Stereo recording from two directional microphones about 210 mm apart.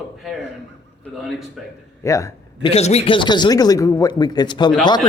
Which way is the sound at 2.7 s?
30° left (ahead or behind).